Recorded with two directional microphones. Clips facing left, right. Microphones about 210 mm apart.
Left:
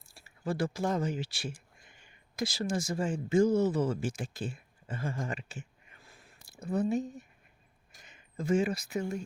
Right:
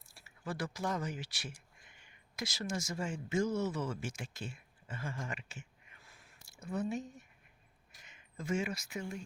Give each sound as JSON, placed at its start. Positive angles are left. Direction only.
{"t": 0.0, "sound": "speech", "side_deg": 30}